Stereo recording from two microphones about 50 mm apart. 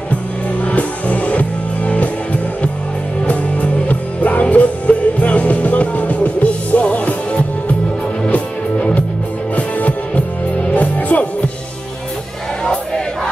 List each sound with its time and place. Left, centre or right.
0.7 s music: left
8.7 s music: left